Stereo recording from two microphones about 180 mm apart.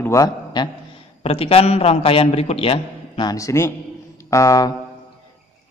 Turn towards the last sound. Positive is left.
turn(degrees=15)  # may be behind; listen again after turning